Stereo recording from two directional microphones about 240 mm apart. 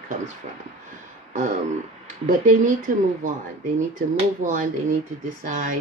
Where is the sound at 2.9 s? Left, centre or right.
Right.